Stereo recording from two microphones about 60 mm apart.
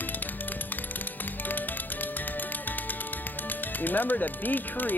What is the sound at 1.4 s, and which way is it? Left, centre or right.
Music, left.